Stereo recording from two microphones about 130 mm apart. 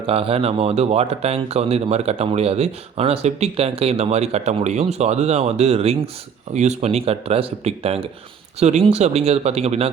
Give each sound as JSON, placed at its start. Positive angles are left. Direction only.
{"t": 0.1, "sound": "speech", "side_deg": -45}
{"t": 6.5, "sound": "speech", "side_deg": -60}
{"t": 8.5, "sound": "speech", "side_deg": -60}